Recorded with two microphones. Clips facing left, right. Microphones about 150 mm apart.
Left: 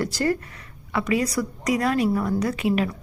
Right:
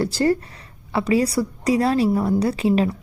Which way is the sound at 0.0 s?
30° right (ahead or behind).